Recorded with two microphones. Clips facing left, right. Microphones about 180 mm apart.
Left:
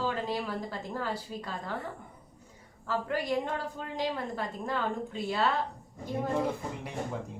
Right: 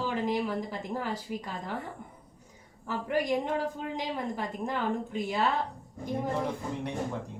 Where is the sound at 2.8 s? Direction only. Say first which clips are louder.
Right 2 dB; 15° right (ahead or behind).